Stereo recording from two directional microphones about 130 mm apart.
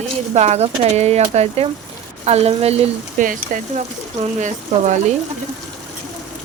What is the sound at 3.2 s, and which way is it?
Speech, 90° right.